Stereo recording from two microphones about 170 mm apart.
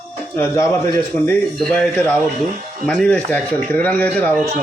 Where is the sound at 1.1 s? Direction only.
5° left (ahead or behind).